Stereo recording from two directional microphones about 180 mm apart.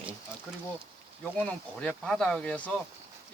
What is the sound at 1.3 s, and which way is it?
Speech, 5° left (ahead or behind).